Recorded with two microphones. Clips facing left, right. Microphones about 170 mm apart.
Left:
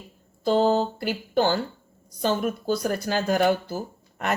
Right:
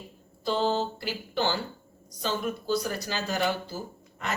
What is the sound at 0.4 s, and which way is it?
Speech, 50° left (ahead or behind).